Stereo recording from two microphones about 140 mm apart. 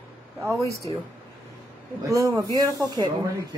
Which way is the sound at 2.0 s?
25° right (ahead or behind).